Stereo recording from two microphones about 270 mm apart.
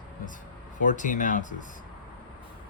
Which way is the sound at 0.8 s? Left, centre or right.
Left.